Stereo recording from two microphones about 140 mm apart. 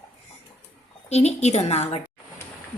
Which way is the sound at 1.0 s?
50° left (ahead or behind).